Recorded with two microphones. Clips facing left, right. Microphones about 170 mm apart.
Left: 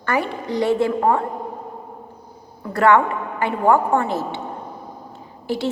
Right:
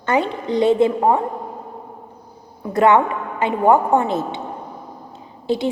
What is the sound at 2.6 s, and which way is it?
A woman's voice, 20° right (ahead or behind).